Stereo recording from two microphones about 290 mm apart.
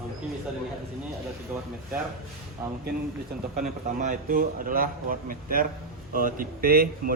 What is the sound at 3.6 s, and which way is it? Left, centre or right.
A man's voice, right.